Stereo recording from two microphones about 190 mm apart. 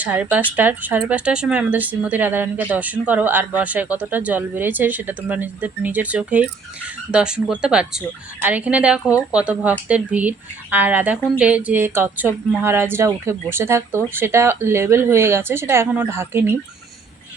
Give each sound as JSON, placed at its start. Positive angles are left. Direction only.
{"t": 0.0, "sound": "speech", "side_deg": -5}